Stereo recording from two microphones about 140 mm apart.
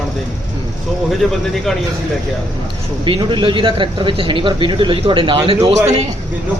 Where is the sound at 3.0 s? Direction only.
35° right (ahead or behind).